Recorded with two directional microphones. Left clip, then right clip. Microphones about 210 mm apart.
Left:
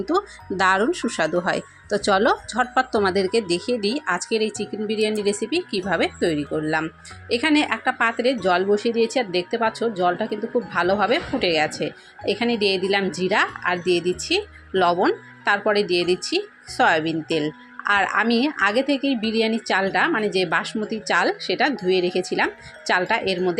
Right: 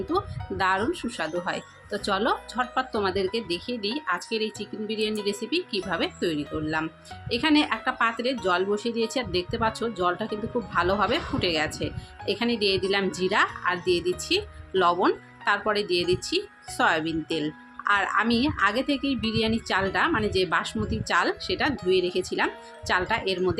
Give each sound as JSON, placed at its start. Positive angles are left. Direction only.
{"t": 0.1, "sound": "speech", "side_deg": 25}